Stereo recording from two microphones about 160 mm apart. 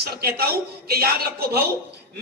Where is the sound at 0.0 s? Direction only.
75° right (ahead or behind).